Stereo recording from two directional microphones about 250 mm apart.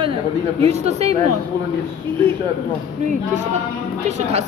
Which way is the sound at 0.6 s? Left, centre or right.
Right.